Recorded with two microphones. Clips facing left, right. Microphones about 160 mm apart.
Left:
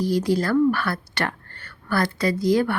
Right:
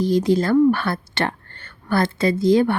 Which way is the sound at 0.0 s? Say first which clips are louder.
Right 4 dB; 20° right (ahead or behind).